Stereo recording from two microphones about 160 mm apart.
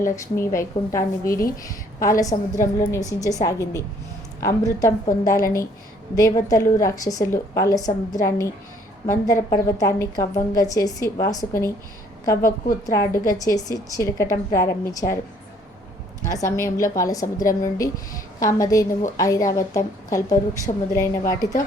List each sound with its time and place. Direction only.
0.2 s a woman's voice: 20° left (ahead or behind)
6.1 s a woman's voice: 20° left (ahead or behind)
16.2 s a woman's voice: 20° left (ahead or behind)